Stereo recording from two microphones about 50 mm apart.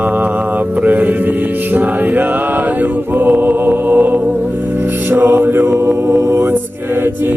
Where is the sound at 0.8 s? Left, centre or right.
Right.